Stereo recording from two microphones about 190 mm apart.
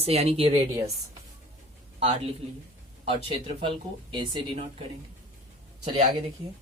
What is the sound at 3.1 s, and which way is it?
Speech, 30° right (ahead or behind).